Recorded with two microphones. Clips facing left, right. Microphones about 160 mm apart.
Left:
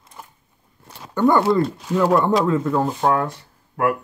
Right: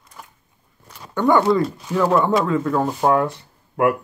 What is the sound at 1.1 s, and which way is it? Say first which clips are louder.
Speech: even; 5° left (ahead or behind).